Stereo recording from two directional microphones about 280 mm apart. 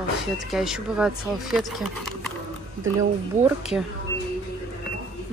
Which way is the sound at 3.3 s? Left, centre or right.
Right.